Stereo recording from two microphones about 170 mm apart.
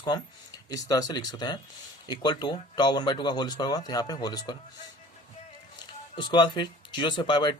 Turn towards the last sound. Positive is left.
turn(degrees=25)  # may be behind; listen again after turning